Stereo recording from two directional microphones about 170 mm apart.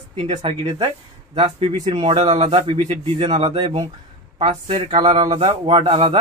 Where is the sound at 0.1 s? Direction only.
30° right (ahead or behind).